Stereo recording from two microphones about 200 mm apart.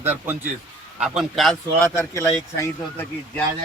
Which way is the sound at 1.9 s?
10° left (ahead or behind).